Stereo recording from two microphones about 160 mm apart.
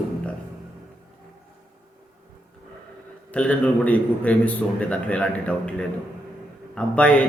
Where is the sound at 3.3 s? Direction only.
10° left (ahead or behind).